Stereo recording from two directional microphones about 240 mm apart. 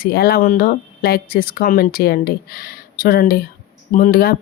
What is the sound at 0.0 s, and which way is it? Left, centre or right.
Speech, left.